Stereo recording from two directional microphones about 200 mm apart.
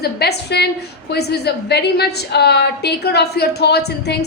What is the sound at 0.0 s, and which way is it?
A woman's voice, 55° left (ahead or behind).